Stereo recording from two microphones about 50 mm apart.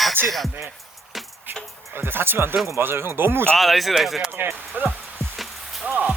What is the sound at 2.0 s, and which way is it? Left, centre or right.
Speech, right.